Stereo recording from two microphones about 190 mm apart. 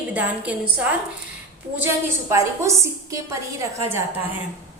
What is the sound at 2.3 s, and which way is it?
A woman's voice, 15° right (ahead or behind).